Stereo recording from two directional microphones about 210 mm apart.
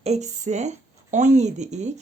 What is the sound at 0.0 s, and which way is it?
Speech, 35° right (ahead or behind).